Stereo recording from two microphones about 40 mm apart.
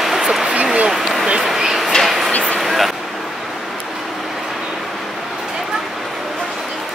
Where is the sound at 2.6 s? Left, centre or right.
Centre.